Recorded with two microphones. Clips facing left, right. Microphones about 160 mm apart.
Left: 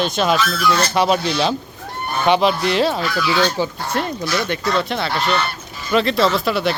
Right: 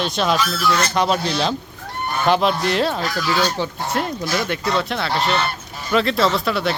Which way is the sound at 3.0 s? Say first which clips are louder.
Left 2 dB; 40° right (ahead or behind).